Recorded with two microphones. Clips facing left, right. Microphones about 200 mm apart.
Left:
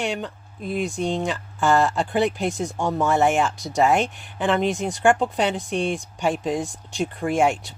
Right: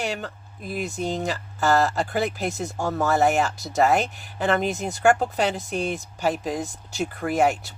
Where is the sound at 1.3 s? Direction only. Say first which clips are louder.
Left 1 dB; 40° right (ahead or behind).